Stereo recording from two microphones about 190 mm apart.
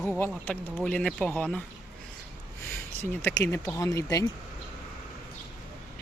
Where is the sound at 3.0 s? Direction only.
15° left (ahead or behind).